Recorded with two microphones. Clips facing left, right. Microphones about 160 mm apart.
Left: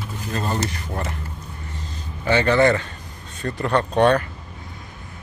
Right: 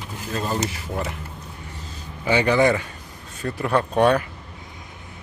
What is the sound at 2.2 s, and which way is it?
Speech, 10° right (ahead or behind).